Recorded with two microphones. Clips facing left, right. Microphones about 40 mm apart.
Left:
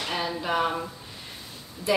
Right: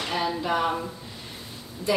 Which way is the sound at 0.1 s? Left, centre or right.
Centre.